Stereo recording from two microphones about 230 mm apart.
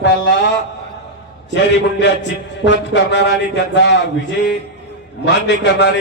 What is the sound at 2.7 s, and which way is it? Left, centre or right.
A man's voice, left.